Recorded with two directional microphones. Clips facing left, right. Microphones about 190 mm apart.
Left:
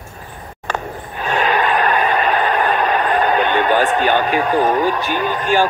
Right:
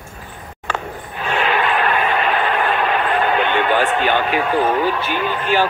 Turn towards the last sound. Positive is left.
turn(degrees=45)  # may be behind; listen again after turning